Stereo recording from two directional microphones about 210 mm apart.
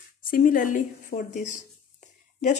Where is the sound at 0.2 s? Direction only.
40° left (ahead or behind).